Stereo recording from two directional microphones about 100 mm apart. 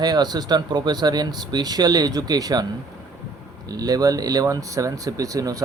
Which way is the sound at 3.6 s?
40° right (ahead or behind).